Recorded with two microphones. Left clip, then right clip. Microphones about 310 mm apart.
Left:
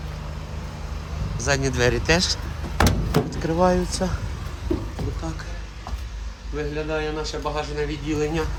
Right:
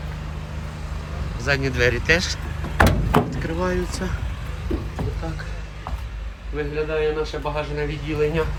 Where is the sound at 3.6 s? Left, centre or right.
Centre.